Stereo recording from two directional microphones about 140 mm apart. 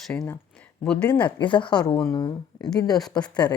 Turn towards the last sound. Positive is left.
turn(degrees=30)  # may be behind; listen again after turning